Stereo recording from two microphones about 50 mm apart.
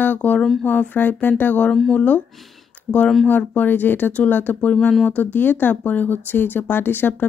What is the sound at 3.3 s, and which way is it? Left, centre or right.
Speech, left.